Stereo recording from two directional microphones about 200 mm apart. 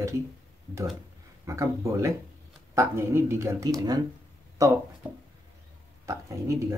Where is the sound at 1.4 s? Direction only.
15° right (ahead or behind).